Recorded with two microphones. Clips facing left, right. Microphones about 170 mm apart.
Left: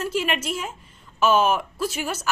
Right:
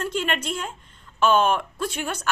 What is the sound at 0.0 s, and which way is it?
A woman's voice, 5° left (ahead or behind).